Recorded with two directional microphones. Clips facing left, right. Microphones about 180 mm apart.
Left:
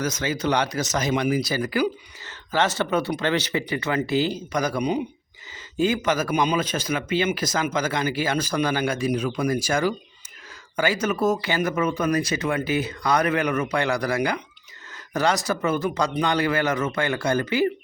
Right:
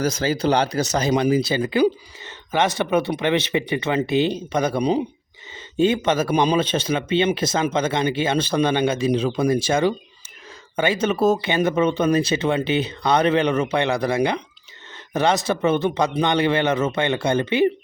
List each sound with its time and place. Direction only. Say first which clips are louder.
0.0 s speech: right 4 dB; 30° right (ahead or behind)